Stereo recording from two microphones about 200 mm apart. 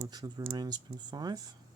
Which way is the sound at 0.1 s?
20° right (ahead or behind).